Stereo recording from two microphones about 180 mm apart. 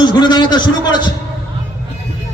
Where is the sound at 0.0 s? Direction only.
25° left (ahead or behind).